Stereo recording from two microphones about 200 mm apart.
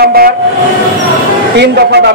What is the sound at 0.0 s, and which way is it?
Train, 50° right (ahead or behind).